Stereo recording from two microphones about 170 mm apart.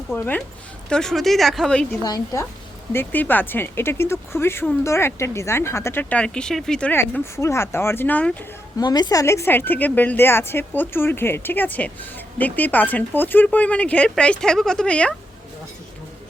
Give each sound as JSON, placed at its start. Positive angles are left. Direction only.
{"t": 0.1, "sound": "a woman's voice", "side_deg": 15}
{"t": 2.0, "sound": "a woman's voice", "side_deg": 20}
{"t": 8.8, "sound": "a woman's voice", "side_deg": 25}